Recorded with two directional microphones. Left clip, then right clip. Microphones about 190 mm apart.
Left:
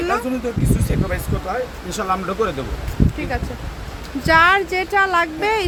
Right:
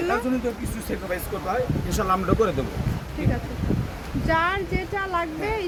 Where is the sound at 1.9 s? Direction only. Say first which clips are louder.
Left 1 dB; 5° right (ahead or behind).